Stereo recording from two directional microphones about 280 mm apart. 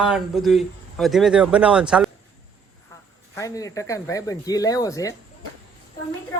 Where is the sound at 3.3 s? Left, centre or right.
Centre.